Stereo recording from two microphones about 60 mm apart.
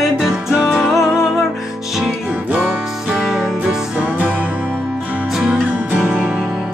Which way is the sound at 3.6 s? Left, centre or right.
Right.